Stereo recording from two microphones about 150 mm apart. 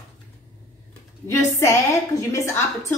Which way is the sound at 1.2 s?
20° left (ahead or behind).